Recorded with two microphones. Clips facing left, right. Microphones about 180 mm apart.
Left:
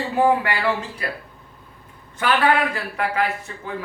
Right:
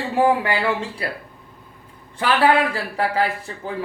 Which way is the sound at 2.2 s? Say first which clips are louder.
Right 2 dB; 30° right (ahead or behind).